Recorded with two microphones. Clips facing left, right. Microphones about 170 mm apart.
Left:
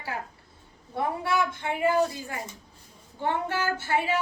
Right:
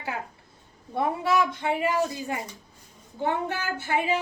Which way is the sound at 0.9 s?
20° right (ahead or behind).